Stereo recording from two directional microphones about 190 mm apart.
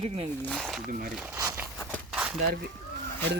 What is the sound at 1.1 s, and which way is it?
Speech, 5° right (ahead or behind).